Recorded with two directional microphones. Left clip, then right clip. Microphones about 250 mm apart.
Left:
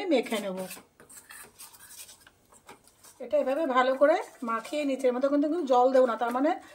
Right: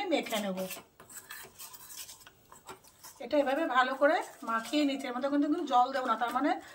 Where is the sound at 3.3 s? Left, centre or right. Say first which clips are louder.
Left 3 dB; left.